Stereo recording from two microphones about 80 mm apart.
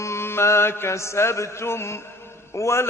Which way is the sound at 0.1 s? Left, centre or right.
Left.